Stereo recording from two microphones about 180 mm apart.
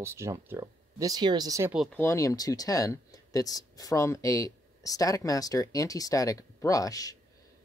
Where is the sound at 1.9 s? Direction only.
15° left (ahead or behind).